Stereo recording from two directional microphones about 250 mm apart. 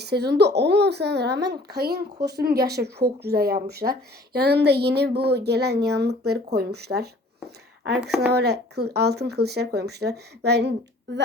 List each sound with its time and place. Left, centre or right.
0.0 s a woman's voice: right
8.3 s a woman's voice: right